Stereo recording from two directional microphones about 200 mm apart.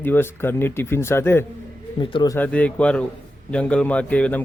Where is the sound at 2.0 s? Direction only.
25° left (ahead or behind).